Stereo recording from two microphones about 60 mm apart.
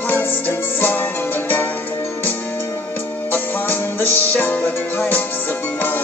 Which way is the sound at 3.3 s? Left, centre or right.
Left.